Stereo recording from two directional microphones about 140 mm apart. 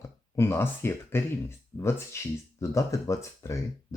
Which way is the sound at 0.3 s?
20° left (ahead or behind).